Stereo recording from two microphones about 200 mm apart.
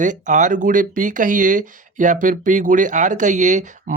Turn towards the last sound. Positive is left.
turn(degrees=-40)  # may be behind; listen again after turning